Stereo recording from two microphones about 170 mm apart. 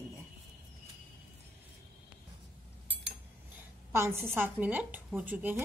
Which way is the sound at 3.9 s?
15° right (ahead or behind).